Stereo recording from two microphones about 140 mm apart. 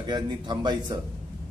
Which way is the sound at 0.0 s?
30° right (ahead or behind).